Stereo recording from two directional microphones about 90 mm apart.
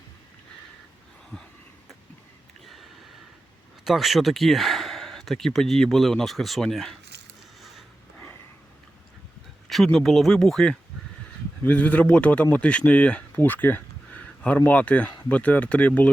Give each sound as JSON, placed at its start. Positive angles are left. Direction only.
{"t": 3.8, "sound": "speech", "side_deg": 0}
{"t": 9.6, "sound": "speech", "side_deg": 5}
{"t": 11.6, "sound": "speech", "side_deg": 15}